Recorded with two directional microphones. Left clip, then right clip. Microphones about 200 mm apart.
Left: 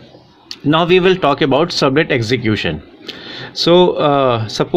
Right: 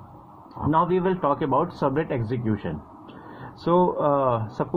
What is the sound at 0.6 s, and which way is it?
Speech, 45° left (ahead or behind).